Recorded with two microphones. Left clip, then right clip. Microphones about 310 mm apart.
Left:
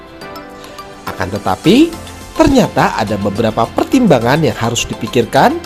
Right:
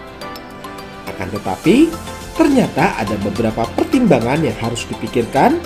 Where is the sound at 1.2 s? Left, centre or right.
Left.